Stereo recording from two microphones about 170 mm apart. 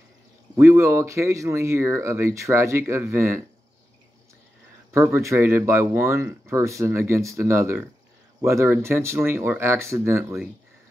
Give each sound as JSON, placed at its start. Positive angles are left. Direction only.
{"t": 0.6, "sound": "speech", "side_deg": -15}
{"t": 4.9, "sound": "speech", "side_deg": -15}